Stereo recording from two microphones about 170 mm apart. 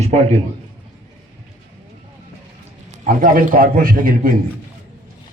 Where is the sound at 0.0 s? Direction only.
40° right (ahead or behind).